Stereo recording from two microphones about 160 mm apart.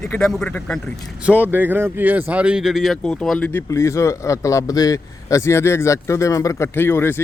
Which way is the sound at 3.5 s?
15° left (ahead or behind).